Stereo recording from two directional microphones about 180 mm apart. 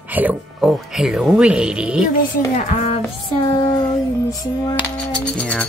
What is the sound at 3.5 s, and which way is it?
Speech, 25° left (ahead or behind).